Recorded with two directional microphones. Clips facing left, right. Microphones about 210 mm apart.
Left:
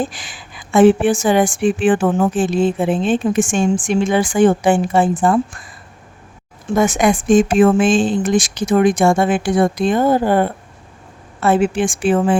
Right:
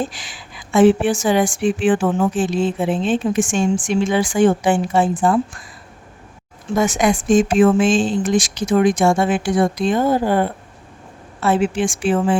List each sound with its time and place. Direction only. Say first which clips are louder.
0.1 s a woman's voice: left 1 dB; 50° left (ahead or behind)
6.7 s a woman's voice: left 2 dB; 55° left (ahead or behind)